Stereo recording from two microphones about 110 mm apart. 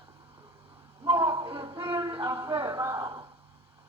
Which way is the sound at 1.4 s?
45° right (ahead or behind).